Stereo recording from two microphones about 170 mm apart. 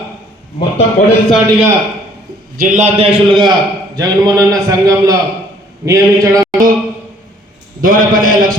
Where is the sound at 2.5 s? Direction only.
50° right (ahead or behind).